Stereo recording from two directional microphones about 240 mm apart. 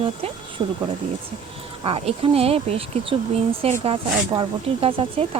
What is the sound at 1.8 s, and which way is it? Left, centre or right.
Speech, right.